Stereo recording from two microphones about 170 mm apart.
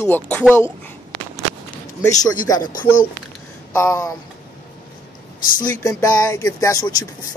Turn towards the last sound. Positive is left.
turn(degrees=20)  # may be behind; listen again after turning